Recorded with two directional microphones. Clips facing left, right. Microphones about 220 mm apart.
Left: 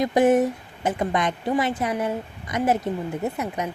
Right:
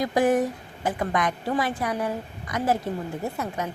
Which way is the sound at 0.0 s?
20° left (ahead or behind).